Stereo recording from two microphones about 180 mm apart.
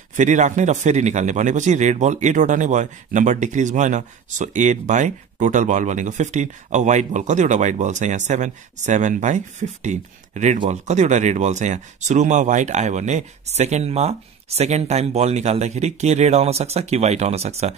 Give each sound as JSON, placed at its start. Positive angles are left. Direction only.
{"t": 0.1, "sound": "a man's voice", "side_deg": -45}